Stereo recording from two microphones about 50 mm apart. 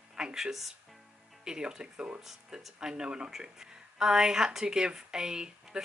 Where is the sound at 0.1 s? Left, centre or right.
Centre.